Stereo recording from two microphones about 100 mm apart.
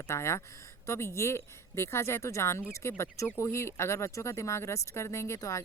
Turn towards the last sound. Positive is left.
turn(degrees=30)  # may be behind; listen again after turning